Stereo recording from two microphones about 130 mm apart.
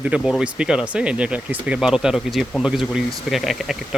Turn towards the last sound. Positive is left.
turn(degrees=-5)  # may be behind; listen again after turning